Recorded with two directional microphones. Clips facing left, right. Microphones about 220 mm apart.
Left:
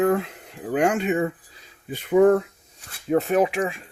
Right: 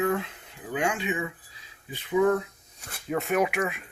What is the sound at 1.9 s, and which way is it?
Speech, 55° left (ahead or behind).